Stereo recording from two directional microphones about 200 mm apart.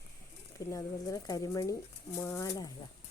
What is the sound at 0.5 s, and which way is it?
A woman's voice, 15° left (ahead or behind).